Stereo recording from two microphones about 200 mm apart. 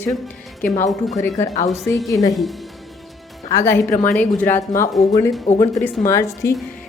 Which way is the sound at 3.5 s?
15° left (ahead or behind).